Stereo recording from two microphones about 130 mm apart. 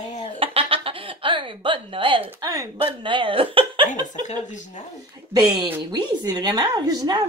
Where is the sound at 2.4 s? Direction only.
30° right (ahead or behind).